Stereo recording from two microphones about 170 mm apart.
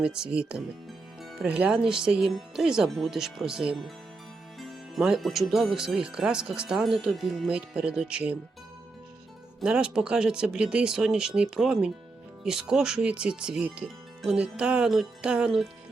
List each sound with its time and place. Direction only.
0.0 s speech: 5° right (ahead or behind)
4.9 s speech: 5° right (ahead or behind)
9.6 s speech: 5° right (ahead or behind)